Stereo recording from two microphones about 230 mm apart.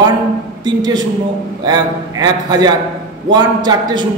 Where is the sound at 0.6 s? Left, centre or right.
Centre.